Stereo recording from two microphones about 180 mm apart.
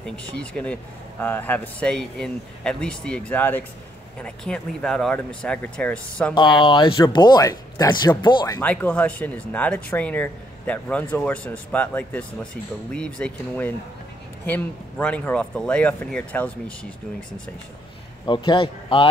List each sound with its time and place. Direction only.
0.0 s a man's voice: 5° left (ahead or behind)
6.3 s speech: 25° left (ahead or behind)
8.5 s a man's voice: 10° left (ahead or behind)
18.2 s speech: 25° left (ahead or behind)